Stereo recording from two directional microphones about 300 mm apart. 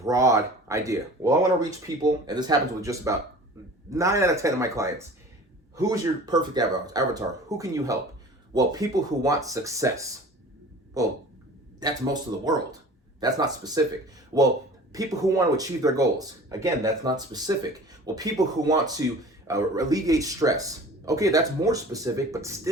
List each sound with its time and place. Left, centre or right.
0.0 s speech: centre